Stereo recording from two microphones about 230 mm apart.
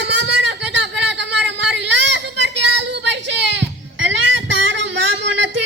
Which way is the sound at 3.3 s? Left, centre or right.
Right.